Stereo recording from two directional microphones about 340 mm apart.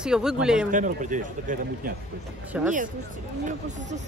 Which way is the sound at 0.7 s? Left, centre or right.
Right.